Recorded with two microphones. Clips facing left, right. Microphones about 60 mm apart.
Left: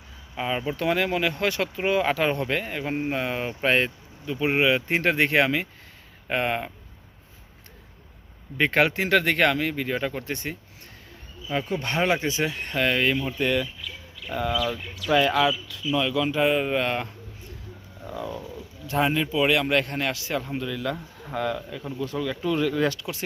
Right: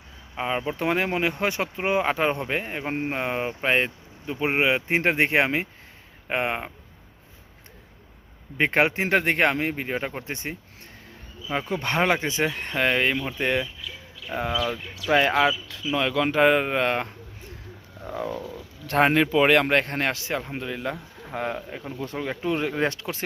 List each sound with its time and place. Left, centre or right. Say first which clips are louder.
0.3 s speech: even; right
8.5 s speech: even; right
18.9 s speech: right 4 dB; right